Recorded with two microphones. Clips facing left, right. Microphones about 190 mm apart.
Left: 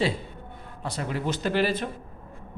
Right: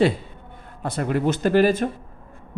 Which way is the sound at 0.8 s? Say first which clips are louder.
Right 7 dB; 55° right (ahead or behind).